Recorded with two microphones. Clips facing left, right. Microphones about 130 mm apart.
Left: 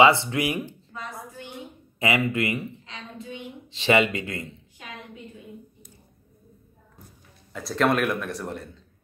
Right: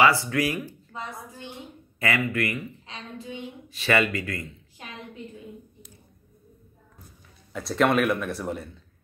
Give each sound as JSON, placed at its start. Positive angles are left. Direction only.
{"t": 0.0, "sound": "speech", "side_deg": 25}
{"t": 2.0, "sound": "speech", "side_deg": 20}
{"t": 3.6, "sound": "speech", "side_deg": 25}
{"t": 7.5, "sound": "speech", "side_deg": 0}